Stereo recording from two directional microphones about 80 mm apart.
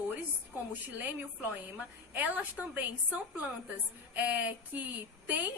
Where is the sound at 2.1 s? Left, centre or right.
Centre.